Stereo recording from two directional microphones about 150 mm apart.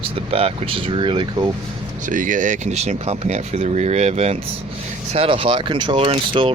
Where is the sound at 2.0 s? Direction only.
60° right (ahead or behind).